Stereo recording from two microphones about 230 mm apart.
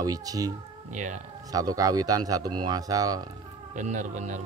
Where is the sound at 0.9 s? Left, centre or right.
Right.